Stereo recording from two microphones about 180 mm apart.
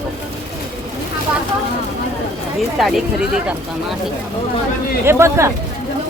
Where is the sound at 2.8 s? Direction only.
Centre (ahead or behind).